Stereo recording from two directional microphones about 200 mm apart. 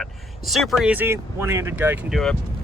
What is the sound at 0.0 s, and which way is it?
Speech, centre (ahead or behind).